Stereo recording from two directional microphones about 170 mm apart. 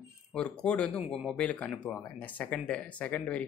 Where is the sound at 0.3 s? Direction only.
5° left (ahead or behind).